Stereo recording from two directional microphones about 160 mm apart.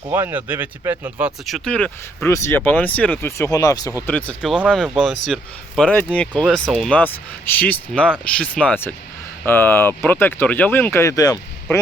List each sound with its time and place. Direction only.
0.1 s speech: 15° right (ahead or behind)
1.5 s speech: 5° left (ahead or behind)
2.3 s speech: 15° left (ahead or behind)
4.0 s speech: 10° left (ahead or behind)
4.5 s speech: 5° right (ahead or behind); by 11.8 s 20° left (ahead or behind)